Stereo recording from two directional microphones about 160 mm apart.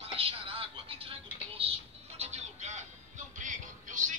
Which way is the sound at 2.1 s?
45° right (ahead or behind).